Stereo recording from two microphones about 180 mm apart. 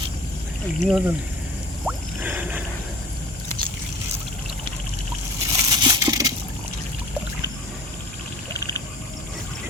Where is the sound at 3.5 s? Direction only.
5° left (ahead or behind).